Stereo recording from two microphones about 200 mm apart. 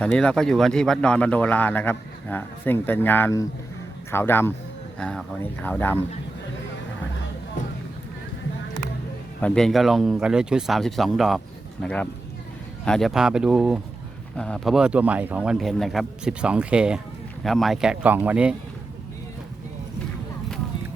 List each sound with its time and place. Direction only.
0.0 s speech: 5° left (ahead or behind)
9.4 s speech: 5° left (ahead or behind)